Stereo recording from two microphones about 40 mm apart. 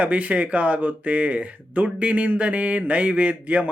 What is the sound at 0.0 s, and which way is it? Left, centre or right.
Speech, right.